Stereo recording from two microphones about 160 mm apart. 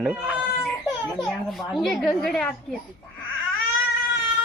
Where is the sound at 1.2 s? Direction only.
Centre (ahead or behind).